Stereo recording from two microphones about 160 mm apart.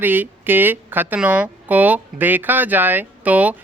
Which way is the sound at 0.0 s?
10° right (ahead or behind).